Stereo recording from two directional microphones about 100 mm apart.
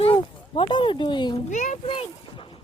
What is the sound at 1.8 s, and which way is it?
Boat, 65° left (ahead or behind).